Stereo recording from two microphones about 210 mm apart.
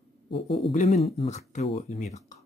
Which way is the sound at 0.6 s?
30° left (ahead or behind).